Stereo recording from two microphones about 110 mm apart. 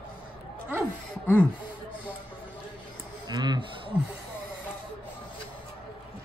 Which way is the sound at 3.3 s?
40° right (ahead or behind).